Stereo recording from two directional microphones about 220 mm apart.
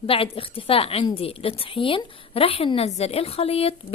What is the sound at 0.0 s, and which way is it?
A woman's voice, 25° left (ahead or behind).